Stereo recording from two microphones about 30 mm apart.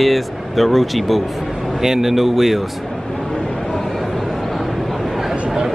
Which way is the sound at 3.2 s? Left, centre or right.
Left.